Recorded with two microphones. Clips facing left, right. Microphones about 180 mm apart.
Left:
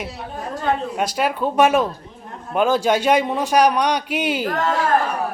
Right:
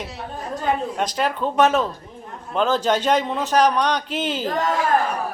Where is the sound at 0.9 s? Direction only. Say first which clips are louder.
Left 2 dB; 10° left (ahead or behind).